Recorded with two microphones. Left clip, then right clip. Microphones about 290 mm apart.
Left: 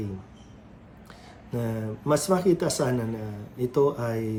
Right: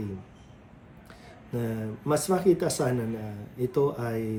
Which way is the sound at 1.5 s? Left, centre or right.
Centre.